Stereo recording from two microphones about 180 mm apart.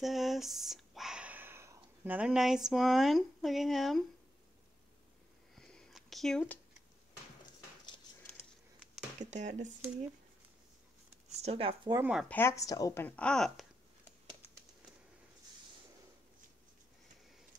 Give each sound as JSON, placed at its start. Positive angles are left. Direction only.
{"t": 0.0, "sound": "speech", "side_deg": 0}
{"t": 5.6, "sound": "a sound", "side_deg": 5}
{"t": 9.2, "sound": "speech", "side_deg": -40}
{"t": 11.4, "sound": "speech", "side_deg": -30}
{"t": 12.0, "sound": "speech", "side_deg": -5}
{"t": 12.3, "sound": "speech", "side_deg": 15}